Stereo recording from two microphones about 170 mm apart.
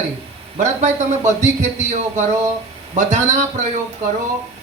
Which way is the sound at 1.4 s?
45° right (ahead or behind).